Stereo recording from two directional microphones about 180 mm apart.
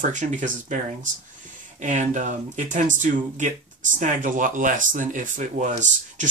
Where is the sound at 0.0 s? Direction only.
45° right (ahead or behind).